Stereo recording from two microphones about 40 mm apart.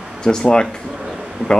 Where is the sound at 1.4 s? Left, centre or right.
Right.